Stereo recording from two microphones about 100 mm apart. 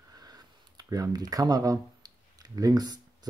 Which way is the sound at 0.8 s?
40° right (ahead or behind).